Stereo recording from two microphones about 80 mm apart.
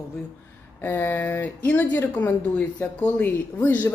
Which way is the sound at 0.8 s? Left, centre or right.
Left.